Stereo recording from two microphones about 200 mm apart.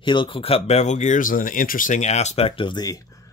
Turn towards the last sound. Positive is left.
turn(degrees=20)  # may be behind; listen again after turning